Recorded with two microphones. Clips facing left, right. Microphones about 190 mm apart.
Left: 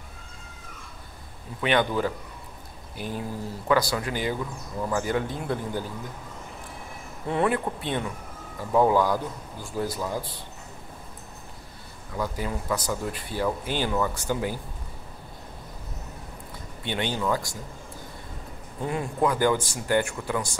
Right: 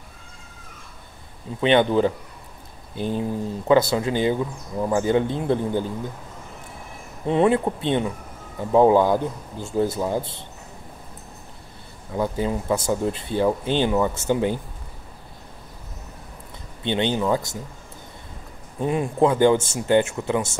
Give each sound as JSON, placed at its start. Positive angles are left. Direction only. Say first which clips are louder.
{"t": 1.6, "sound": "speech", "louder": "right 6 dB", "side_deg": -25}
{"t": 7.2, "sound": "speech", "louder": "right 6 dB", "side_deg": -20}
{"t": 12.1, "sound": "speech", "louder": "right 6 dB", "side_deg": -25}
{"t": 16.8, "sound": "speech", "louder": "right 6 dB", "side_deg": -25}
{"t": 18.8, "sound": "speech", "louder": "right 6 dB", "side_deg": -20}